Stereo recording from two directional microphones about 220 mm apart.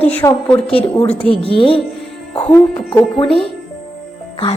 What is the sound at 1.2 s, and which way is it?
Music, 25° left (ahead or behind).